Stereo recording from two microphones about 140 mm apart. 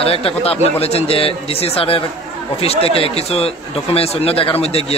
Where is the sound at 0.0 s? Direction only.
45° left (ahead or behind).